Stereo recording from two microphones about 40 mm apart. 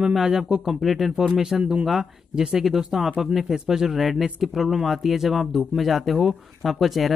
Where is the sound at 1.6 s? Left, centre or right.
Right.